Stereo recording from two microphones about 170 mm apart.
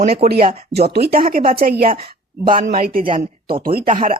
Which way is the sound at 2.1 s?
55° right (ahead or behind).